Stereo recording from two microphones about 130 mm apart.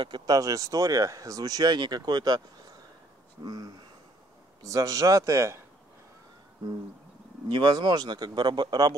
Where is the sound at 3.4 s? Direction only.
30° right (ahead or behind).